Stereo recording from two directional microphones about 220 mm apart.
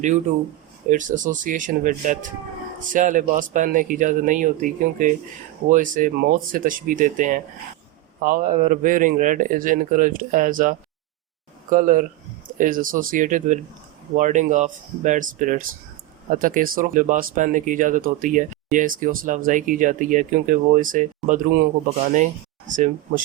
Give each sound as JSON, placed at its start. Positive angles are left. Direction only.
{"t": 0.9, "sound": "speech", "side_deg": -35}